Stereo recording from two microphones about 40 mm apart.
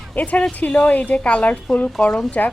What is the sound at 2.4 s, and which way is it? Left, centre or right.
Speech, left.